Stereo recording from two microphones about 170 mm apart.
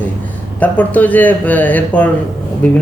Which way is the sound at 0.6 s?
10° left (ahead or behind).